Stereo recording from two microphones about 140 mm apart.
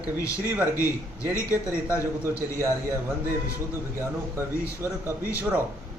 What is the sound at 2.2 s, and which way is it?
A man's voice, 20° right (ahead or behind).